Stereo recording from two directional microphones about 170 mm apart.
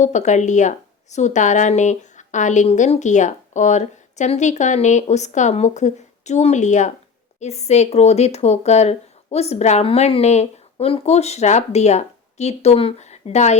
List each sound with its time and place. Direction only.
0.0 s a woman's voice: 45° left (ahead or behind)